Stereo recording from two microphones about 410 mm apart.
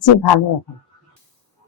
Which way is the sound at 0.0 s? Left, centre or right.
Left.